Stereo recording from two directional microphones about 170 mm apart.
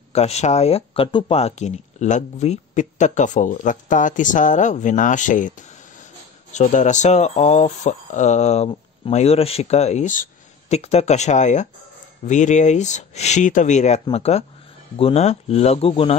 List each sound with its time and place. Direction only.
0.1 s speech: 40° left (ahead or behind)
6.5 s speech: 45° left (ahead or behind)